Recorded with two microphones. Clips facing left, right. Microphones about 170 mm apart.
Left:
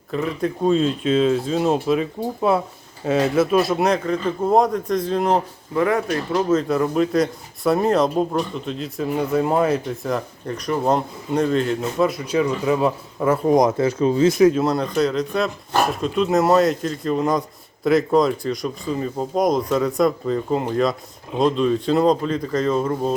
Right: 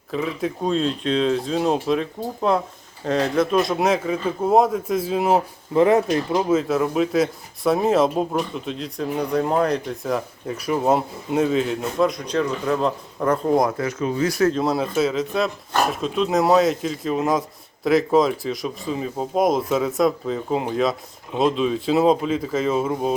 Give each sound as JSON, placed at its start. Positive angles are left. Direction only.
{"t": 0.1, "sound": "speech", "side_deg": 0}
{"t": 5.7, "sound": "speech", "side_deg": -20}
{"t": 6.5, "sound": "speech", "side_deg": -5}
{"t": 14.5, "sound": "speech", "side_deg": 0}